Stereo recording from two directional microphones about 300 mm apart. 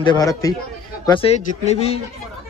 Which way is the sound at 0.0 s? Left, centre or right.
Centre.